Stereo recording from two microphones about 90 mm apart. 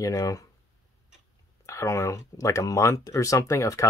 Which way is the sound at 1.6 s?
35° left (ahead or behind).